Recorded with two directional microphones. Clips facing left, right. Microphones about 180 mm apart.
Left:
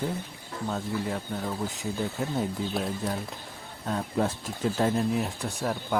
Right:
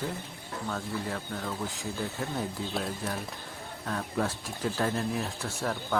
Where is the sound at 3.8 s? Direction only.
20° left (ahead or behind).